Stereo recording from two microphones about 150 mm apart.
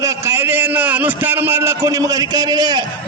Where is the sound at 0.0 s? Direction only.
20° right (ahead or behind).